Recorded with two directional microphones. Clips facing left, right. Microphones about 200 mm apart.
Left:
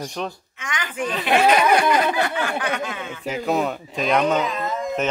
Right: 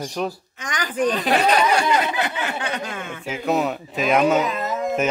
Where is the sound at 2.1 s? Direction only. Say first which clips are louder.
Left 2 dB; 20° right (ahead or behind).